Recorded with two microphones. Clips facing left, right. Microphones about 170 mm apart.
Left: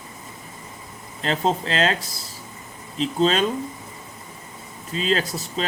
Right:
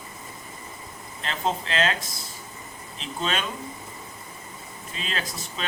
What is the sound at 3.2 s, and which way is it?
Speech, 35° left (ahead or behind).